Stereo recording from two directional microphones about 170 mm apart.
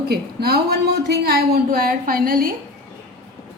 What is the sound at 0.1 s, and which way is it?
A woman's voice, 70° right (ahead or behind).